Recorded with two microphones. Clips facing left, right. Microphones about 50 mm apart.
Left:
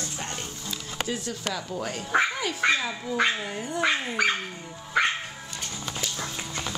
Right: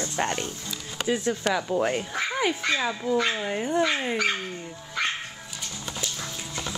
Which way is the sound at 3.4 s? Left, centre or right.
Right.